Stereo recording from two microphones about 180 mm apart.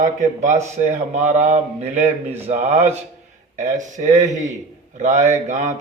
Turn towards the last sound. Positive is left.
turn(degrees=-40)  # may be behind; listen again after turning